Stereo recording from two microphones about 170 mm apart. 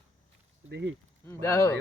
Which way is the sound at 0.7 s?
90° right.